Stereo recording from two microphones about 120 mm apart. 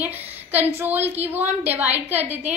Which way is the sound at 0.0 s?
15° right (ahead or behind).